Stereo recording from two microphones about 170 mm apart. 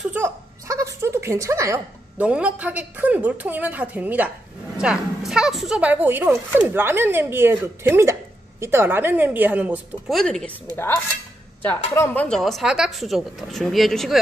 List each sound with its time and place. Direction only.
0.1 s a sound: 15° right (ahead or behind)
2.2 s speech: 5° right (ahead or behind)
10.1 s speech: 5° left (ahead or behind)